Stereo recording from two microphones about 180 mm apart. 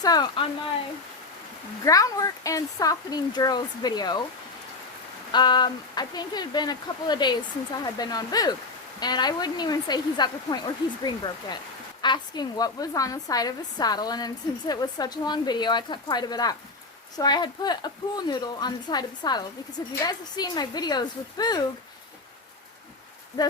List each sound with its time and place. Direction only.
0.0 s a woman's voice: 20° left (ahead or behind)
1.8 s a woman's voice: 20° left (ahead or behind)
5.3 s a woman's voice: 25° left (ahead or behind)